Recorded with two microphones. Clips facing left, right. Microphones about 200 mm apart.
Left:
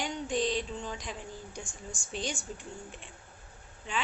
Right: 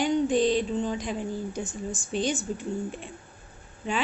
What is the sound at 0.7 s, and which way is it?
Female singing, 35° right (ahead or behind).